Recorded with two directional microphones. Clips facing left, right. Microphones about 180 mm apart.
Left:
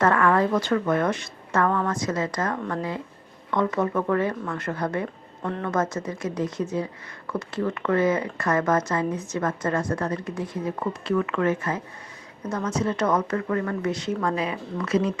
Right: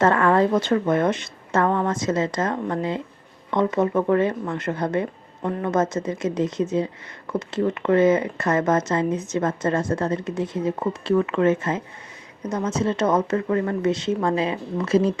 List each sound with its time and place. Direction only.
0.0 s speech: 25° right (ahead or behind)